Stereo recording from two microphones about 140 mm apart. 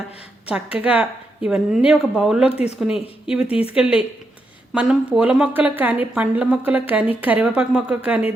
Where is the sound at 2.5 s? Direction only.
45° left (ahead or behind).